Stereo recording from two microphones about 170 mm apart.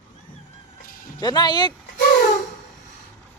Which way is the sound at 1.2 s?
25° left (ahead or behind).